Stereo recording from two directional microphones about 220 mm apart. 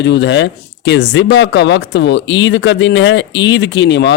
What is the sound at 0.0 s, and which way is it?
Speech, 50° left (ahead or behind).